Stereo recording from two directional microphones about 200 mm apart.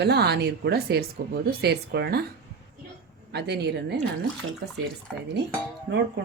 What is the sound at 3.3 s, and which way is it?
Speech, 55° right (ahead or behind).